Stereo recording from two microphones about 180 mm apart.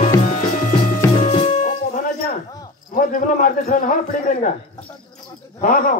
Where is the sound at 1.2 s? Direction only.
30° left (ahead or behind).